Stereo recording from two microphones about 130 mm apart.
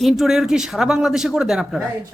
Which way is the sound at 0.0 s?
Centre (ahead or behind).